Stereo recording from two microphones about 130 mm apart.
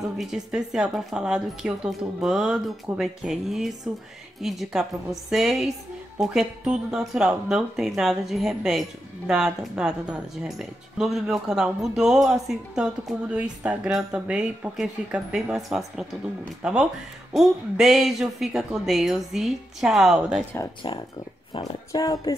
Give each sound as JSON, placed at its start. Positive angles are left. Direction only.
{"t": 0.2, "sound": "speech", "side_deg": -5}
{"t": 21.5, "sound": "speech", "side_deg": 30}